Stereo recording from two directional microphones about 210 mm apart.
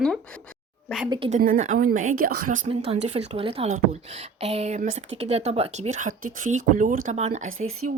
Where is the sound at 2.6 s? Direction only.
30° right (ahead or behind).